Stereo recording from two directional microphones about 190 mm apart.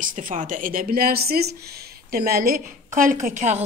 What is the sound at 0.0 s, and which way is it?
A woman's voice, 45° right (ahead or behind).